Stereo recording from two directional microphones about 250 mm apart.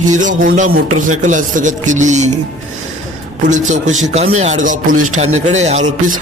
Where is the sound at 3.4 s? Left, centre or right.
Right.